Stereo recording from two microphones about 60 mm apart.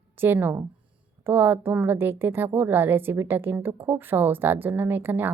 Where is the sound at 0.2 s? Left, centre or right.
Right.